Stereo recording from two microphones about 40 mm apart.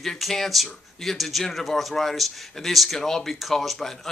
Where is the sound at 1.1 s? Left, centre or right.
Centre.